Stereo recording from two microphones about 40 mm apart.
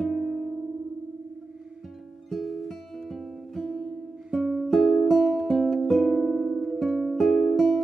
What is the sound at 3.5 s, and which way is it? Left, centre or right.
Music, centre.